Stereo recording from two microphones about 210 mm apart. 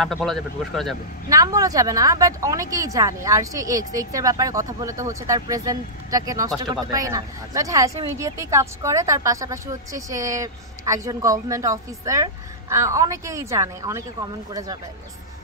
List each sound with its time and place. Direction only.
0.0 s speech: centre (ahead or behind)
1.3 s speech: 15° right (ahead or behind)